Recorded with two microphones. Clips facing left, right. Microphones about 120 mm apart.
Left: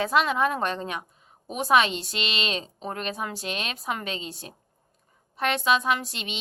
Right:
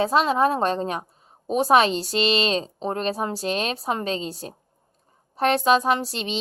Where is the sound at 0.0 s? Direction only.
30° right (ahead or behind).